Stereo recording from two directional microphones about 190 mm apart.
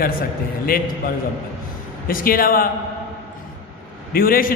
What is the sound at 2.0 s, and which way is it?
Speech, 50° left (ahead or behind).